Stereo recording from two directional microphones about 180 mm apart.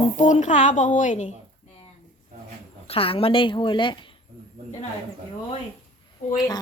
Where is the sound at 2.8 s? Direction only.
30° left (ahead or behind).